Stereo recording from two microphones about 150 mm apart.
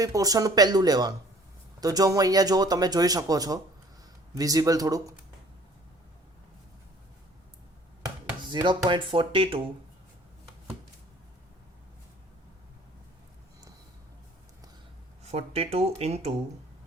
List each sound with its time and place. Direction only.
0.0 s speech: 25° right (ahead or behind)
8.4 s speech: 25° right (ahead or behind)
15.2 s speech: 45° right (ahead or behind)